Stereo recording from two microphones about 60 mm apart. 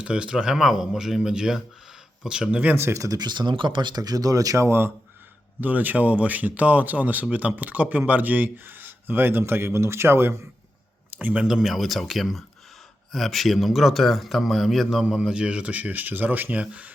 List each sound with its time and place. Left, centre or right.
0.0 s speech: centre
0.6 s speech: centre
2.7 s speech: right
4.0 s speech: right
4.5 s speech: right
5.5 s a man's voice: right
11.2 s a man's voice: right
11.4 s a man's voice: centre; by 16.9 s right